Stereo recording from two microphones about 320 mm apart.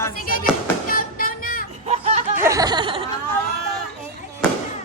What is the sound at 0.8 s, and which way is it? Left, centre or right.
Music, left.